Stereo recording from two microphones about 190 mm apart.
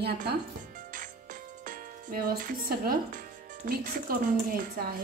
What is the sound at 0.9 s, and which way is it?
Music, 45° right (ahead or behind).